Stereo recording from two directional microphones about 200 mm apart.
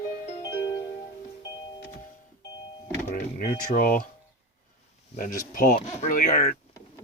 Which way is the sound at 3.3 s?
45° left (ahead or behind).